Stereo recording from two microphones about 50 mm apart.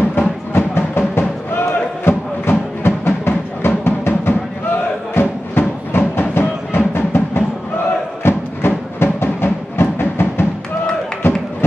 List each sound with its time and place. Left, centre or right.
0.5 s music: left
11.2 s run: left